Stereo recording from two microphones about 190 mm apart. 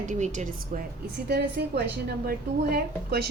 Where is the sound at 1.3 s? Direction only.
60° right (ahead or behind).